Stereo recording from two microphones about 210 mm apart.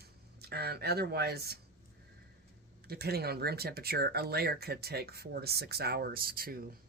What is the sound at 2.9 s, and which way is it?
Speech, 50° right (ahead or behind).